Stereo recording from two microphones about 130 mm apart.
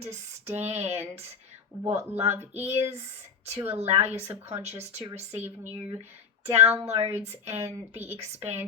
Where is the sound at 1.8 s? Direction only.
25° right (ahead or behind).